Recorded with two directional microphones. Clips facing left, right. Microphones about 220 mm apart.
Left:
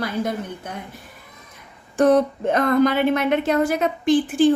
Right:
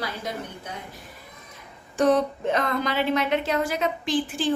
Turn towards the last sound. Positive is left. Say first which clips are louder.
# left 9 dB
turn(degrees=50)  # may be behind; listen again after turning